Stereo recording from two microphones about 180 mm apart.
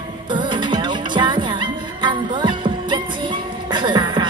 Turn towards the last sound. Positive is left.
turn(degrees=-25)  # may be behind; listen again after turning